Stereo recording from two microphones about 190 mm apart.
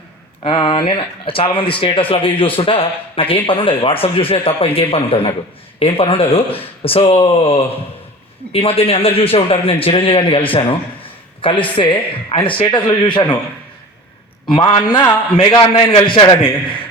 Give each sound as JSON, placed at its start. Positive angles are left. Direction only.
{"t": 0.4, "sound": "speech", "side_deg": 30}
{"t": 14.4, "sound": "speech", "side_deg": 25}